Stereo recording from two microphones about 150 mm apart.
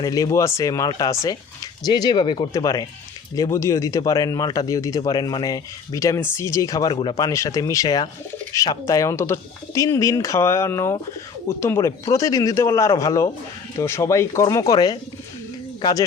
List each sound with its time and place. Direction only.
0.0 s speech: 25° left (ahead or behind)